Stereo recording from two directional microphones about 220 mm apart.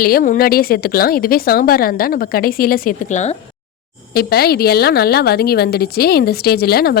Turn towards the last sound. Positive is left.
turn(degrees=45)  # may be behind; listen again after turning